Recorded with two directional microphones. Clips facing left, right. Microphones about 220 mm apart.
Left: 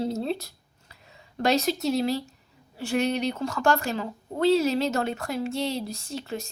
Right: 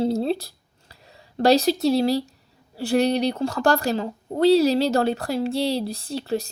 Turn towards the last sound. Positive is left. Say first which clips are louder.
# right 7 dB
turn(degrees=-35)  # may be behind; listen again after turning